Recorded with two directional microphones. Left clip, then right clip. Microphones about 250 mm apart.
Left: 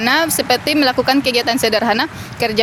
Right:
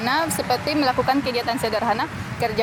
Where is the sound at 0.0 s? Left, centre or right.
Left.